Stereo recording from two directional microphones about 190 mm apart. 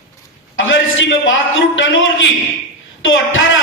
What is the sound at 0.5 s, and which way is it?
A man's voice, 80° left.